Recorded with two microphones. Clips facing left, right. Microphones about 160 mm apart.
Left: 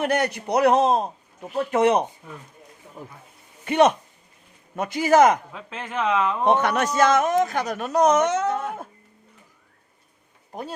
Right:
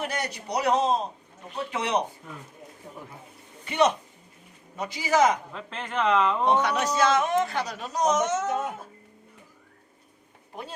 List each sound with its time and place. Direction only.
0.0 s a man's voice: 60° left (ahead or behind)
3.7 s speech: 50° left (ahead or behind)
5.5 s speech: 5° left (ahead or behind)
6.4 s speech: 55° left (ahead or behind)
8.4 s a sound: 20° right (ahead or behind)
10.5 s speech: 45° left (ahead or behind)